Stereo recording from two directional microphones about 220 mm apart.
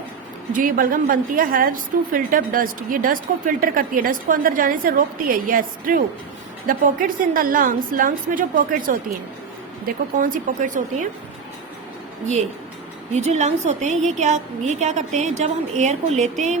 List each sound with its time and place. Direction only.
0.5 s a woman's voice: 40° right (ahead or behind)
13.1 s a woman's voice: 30° right (ahead or behind)